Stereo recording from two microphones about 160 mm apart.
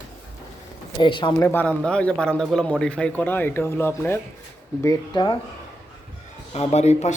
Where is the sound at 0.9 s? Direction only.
30° left (ahead or behind).